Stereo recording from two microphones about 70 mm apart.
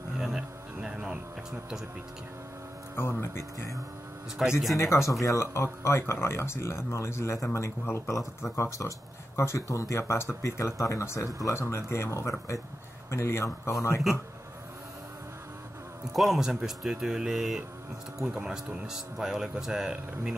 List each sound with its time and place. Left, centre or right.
0.2 s music: centre
3.0 s speech: left
4.4 s speech: centre
4.7 s speech: left
16.1 s speech: centre